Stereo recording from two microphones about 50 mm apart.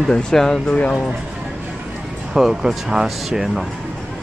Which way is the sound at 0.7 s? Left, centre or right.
Left.